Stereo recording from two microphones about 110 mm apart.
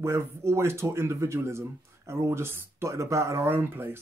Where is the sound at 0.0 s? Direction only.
25° right (ahead or behind).